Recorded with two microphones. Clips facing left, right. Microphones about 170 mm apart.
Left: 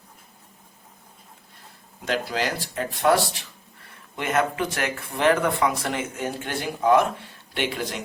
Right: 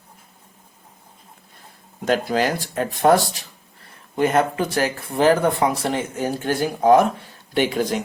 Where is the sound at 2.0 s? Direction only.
50° right (ahead or behind).